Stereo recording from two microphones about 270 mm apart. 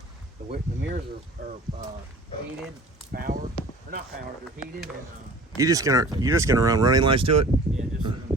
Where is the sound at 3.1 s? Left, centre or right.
Right.